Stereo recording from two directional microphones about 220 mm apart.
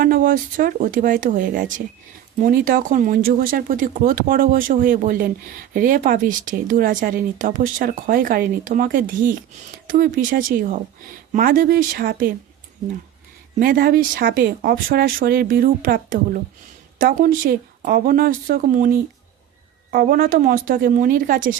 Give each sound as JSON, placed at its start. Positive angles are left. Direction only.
{"t": 0.0, "sound": "speech", "side_deg": -40}
{"t": 13.6, "sound": "speech", "side_deg": -40}